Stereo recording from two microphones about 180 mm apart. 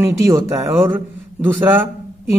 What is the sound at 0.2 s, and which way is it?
A man's voice, 15° right (ahead or behind).